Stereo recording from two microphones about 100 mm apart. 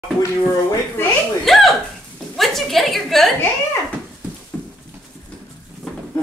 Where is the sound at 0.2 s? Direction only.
25° left (ahead or behind).